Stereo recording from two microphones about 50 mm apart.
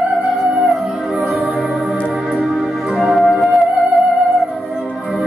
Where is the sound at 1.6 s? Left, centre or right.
Centre.